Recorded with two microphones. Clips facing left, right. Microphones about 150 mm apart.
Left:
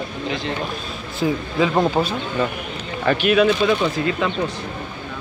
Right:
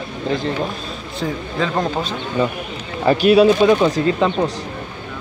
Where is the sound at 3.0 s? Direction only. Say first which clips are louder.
Right 5 dB; 35° right (ahead or behind).